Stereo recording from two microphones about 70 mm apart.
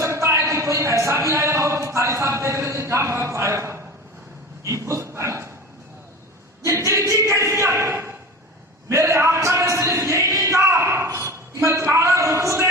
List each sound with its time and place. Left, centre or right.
0.0 s a man's voice: right
4.6 s dog: right
6.7 s a sound: right